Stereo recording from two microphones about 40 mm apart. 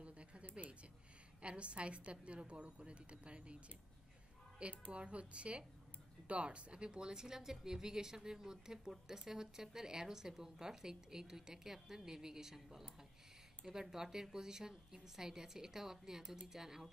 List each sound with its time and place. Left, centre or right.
0.0 s a sound: right
1.4 s a woman's voice: right
4.6 s a woman's voice: right